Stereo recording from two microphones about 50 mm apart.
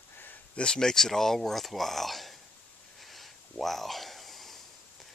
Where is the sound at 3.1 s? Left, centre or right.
Centre.